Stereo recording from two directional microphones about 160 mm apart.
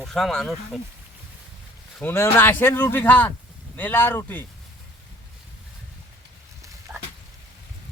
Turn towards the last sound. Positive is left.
turn(degrees=-10)  # may be behind; listen again after turning